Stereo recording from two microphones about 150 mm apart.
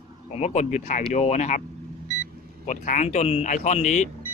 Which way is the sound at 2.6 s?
55° left (ahead or behind).